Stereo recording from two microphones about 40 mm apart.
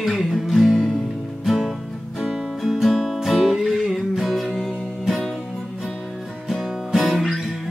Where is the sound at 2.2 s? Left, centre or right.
Right.